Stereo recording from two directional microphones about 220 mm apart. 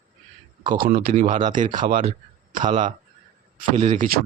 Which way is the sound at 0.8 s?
40° right (ahead or behind).